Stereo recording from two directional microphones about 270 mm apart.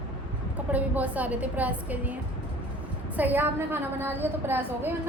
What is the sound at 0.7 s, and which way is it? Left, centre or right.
A woman's voice, centre.